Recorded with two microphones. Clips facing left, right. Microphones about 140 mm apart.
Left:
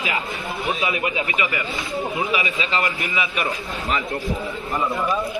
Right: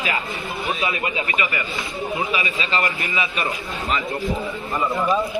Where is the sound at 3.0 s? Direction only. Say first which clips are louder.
Even; centre (ahead or behind).